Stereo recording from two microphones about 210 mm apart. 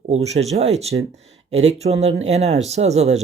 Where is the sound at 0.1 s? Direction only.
30° right (ahead or behind).